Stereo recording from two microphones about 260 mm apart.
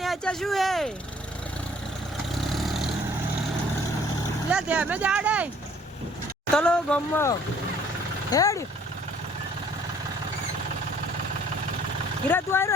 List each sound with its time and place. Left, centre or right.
0.0 s a sound: centre
2.5 s vehicle: centre
4.5 s speech: centre
6.5 s speech: centre
12.3 s speech: centre